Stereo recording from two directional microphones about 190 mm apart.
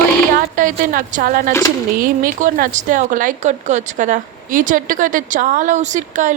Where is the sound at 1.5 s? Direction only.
15° left (ahead or behind).